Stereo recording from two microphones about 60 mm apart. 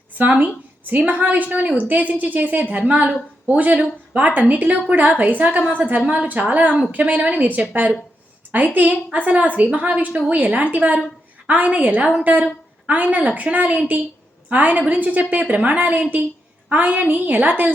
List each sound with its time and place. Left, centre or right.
0.2 s a woman's voice: right